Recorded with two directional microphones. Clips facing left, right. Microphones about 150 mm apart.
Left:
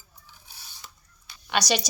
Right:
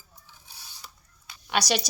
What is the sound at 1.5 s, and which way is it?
Speech, 5° right (ahead or behind).